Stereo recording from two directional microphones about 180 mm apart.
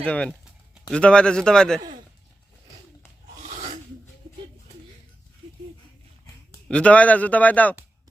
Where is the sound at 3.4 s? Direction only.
40° right (ahead or behind).